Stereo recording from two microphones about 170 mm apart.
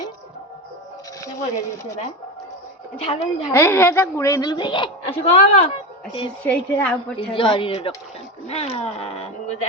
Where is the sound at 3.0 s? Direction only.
35° left (ahead or behind).